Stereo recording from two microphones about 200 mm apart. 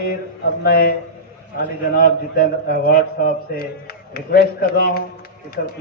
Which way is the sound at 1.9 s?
50° left (ahead or behind).